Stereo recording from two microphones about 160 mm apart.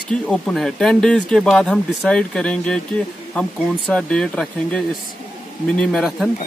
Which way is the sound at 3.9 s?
5° left (ahead or behind).